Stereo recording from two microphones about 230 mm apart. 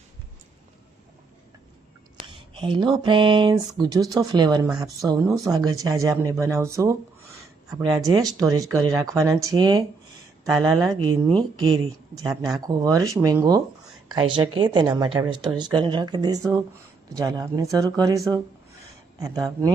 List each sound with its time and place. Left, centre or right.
2.5 s speech: right
12.3 s speech: centre
12.5 s speech: centre
14.6 s speech: centre